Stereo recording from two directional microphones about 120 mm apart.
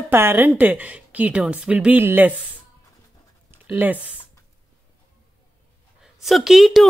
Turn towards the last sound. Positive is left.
turn(degrees=0)  # may be behind; listen again after turning